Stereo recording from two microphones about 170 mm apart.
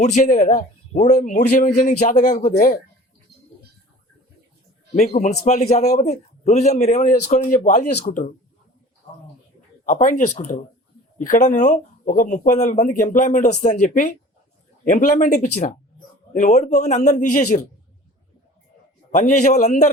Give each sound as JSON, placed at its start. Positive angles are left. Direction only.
{"t": 0.0, "sound": "speech", "side_deg": 45}
{"t": 4.9, "sound": "a man's voice", "side_deg": 40}
{"t": 9.8, "sound": "speech", "side_deg": 45}
{"t": 19.1, "sound": "speech", "side_deg": 45}